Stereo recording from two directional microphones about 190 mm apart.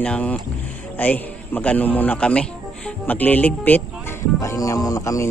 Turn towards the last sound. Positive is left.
turn(degrees=15)  # may be behind; listen again after turning